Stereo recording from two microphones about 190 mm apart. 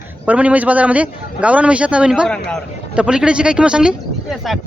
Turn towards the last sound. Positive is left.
turn(degrees=-5)  # may be behind; listen again after turning